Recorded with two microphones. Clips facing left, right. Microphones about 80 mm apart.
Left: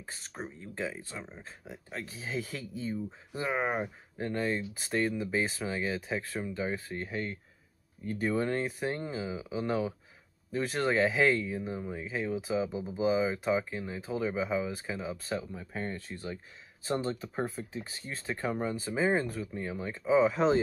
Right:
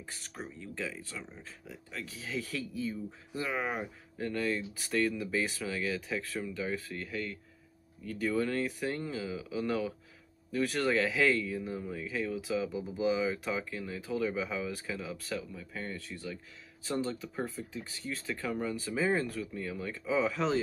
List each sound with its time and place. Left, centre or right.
0.0 s speech: left